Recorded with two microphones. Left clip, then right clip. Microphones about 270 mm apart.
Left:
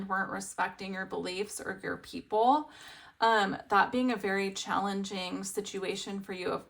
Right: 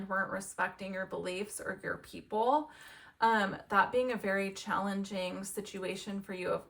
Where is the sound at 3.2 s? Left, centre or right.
Centre.